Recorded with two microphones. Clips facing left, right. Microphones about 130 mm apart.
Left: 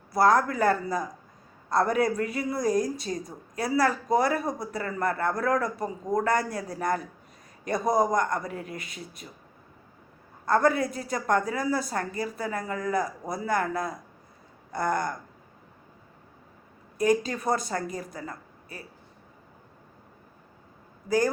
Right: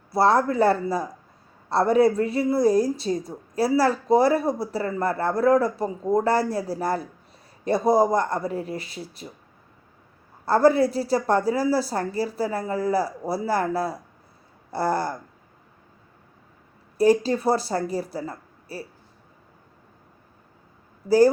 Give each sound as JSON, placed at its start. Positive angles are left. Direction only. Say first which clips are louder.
{"t": 0.1, "sound": "speech", "louder": "right 2 dB", "side_deg": -30}
{"t": 10.4, "sound": "a woman's voice", "louder": "right 5 dB", "side_deg": -30}
{"t": 17.0, "sound": "a woman's voice", "louder": "right 6 dB", "side_deg": -30}